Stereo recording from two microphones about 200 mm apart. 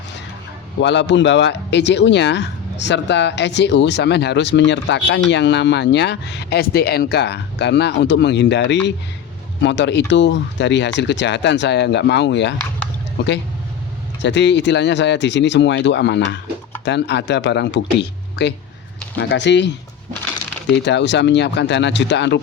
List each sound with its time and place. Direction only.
0.8 s speech: 65° left (ahead or behind)
14.2 s speech: 60° left (ahead or behind)
20.8 s speech: 60° left (ahead or behind)